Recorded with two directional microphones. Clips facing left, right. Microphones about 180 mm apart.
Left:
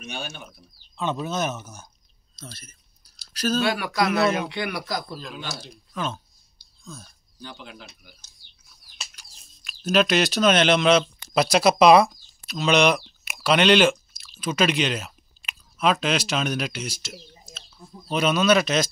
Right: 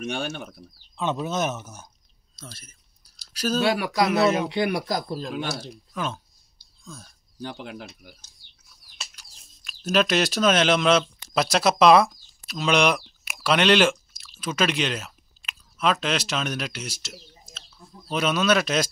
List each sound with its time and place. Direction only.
0.0 s speech: 80° right
1.3 s speech: 10° left (ahead or behind)
3.3 s speech: 5° right (ahead or behind)
3.6 s speech: 30° right (ahead or behind)
4.1 s speech: 20° right (ahead or behind)
4.5 s speech: 45° right (ahead or behind)
5.4 s speech: 55° right (ahead or behind)
5.9 s speech: 5° right (ahead or behind)
6.8 s a sound: 5° left (ahead or behind)
7.4 s speech: 55° right (ahead or behind)
9.8 s speech: 5° right (ahead or behind)
17.6 s a sound: 15° left (ahead or behind)
18.2 s speech: 5° right (ahead or behind)